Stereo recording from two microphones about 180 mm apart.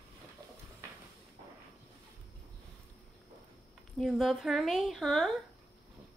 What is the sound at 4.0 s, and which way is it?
Speech, centre (ahead or behind).